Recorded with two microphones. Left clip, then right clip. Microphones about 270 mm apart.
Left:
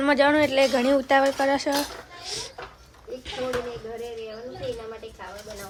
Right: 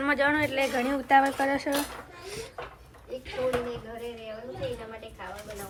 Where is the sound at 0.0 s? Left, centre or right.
Centre.